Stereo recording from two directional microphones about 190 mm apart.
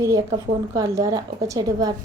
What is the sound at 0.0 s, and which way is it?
A woman's voice, 15° right (ahead or behind).